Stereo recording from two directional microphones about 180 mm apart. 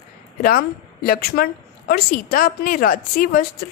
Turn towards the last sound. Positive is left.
turn(degrees=55)  # may be behind; listen again after turning